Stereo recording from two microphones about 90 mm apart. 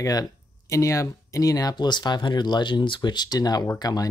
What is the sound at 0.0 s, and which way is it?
Speech, 40° left (ahead or behind).